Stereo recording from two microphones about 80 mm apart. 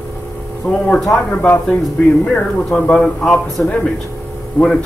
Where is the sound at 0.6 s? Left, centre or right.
Centre.